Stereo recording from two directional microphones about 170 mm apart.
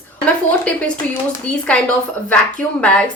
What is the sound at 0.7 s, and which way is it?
A woman's voice, 10° left (ahead or behind).